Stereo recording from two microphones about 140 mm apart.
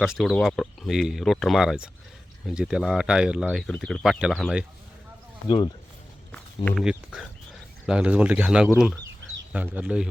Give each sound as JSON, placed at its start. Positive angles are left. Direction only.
{"t": 0.0, "sound": "speech", "side_deg": 0}
{"t": 5.5, "sound": "speech", "side_deg": 30}
{"t": 6.8, "sound": "speech", "side_deg": -5}
{"t": 9.0, "sound": "chicken", "side_deg": -10}